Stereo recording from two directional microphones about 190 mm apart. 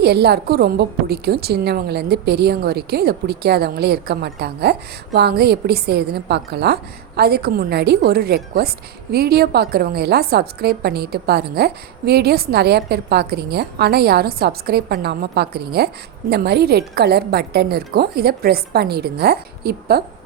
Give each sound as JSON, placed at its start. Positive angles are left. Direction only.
{"t": 0.0, "sound": "a woman's voice", "side_deg": -60}